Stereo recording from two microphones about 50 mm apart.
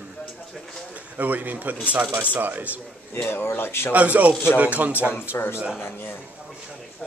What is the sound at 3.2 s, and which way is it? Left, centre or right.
Speech, left.